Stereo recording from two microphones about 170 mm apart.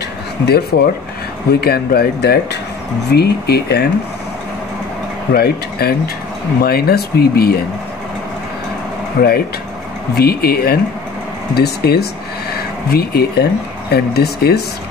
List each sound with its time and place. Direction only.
0.5 s speech: 70° left (ahead or behind)
5.3 s speech: 65° left (ahead or behind)
9.2 s speech: 60° left (ahead or behind)